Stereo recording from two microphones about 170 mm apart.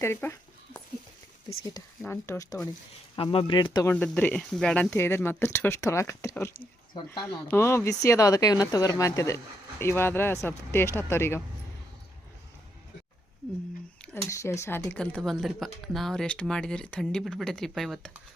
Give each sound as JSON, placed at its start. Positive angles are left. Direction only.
{"t": 0.0, "sound": "a sound", "side_deg": 15}
{"t": 1.5, "sound": "speech", "side_deg": 25}
{"t": 2.0, "sound": "speech", "side_deg": 15}
{"t": 3.2, "sound": "speech", "side_deg": 30}
{"t": 3.9, "sound": "speech", "side_deg": 5}
{"t": 14.3, "sound": "speech", "side_deg": 15}